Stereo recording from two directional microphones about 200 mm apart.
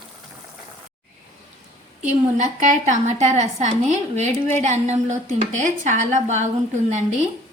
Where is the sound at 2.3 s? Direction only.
35° right (ahead or behind).